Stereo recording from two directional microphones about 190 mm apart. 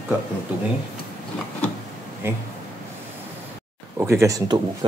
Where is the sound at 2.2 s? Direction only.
10° right (ahead or behind).